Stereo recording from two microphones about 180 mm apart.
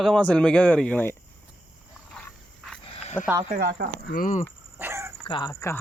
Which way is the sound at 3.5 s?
60° right (ahead or behind).